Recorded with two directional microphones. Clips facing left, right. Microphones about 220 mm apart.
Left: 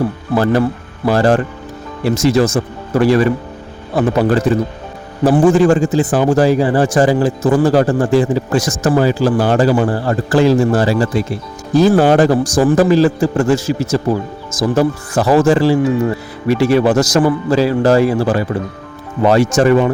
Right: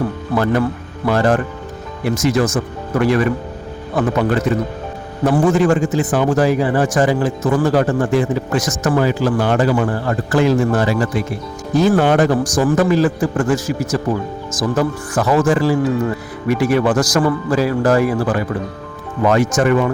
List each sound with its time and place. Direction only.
0.3 s a man's voice: 30° left (ahead or behind)